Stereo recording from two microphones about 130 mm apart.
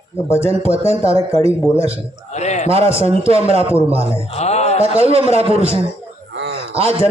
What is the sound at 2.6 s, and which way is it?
Speech, 50° right (ahead or behind).